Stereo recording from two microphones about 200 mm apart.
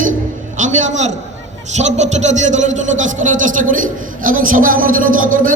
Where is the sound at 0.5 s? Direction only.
40° right (ahead or behind).